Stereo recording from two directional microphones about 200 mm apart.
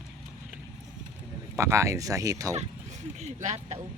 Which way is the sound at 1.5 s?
15° right (ahead or behind).